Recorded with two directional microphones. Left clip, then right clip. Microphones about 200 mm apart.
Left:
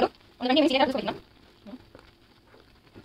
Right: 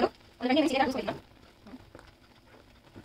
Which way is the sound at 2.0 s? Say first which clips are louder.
Even; 10° left (ahead or behind).